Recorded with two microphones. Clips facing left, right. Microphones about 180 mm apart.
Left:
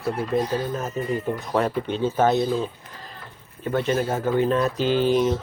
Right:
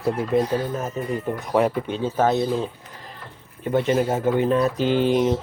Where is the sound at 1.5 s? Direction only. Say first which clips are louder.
Right 4 dB; 10° right (ahead or behind).